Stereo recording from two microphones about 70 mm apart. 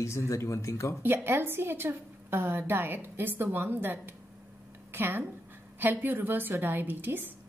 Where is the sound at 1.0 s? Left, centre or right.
Right.